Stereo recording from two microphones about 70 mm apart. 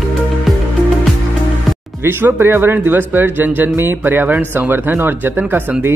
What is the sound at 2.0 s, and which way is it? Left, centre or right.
Speech, right.